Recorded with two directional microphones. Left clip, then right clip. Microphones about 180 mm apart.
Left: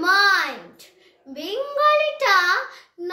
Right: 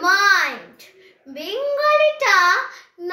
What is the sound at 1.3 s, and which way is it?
A child's voice, 20° left (ahead or behind).